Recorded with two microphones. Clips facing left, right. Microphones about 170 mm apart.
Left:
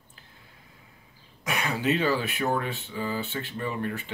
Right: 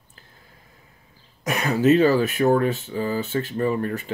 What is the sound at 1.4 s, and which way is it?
Speech, 40° right (ahead or behind).